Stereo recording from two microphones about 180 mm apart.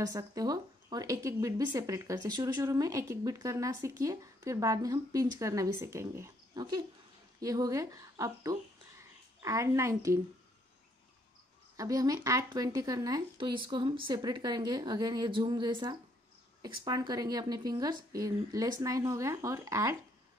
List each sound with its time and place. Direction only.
0.0 s speech: 20° right (ahead or behind)
11.7 s speech: 20° right (ahead or behind)